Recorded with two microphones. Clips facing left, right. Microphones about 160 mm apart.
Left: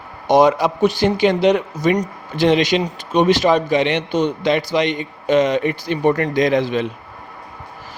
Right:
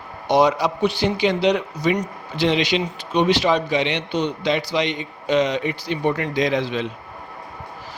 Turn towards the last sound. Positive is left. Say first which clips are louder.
# left 5 dB
turn(degrees=50)  # may be behind; listen again after turning